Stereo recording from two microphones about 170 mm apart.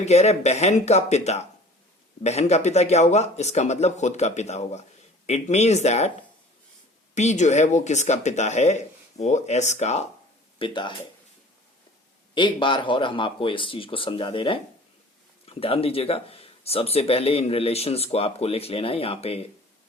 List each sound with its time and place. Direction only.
0.0 s speech: 40° left (ahead or behind)
7.1 s speech: 45° left (ahead or behind)
10.6 s speech: 30° left (ahead or behind)
12.3 s speech: 30° left (ahead or behind)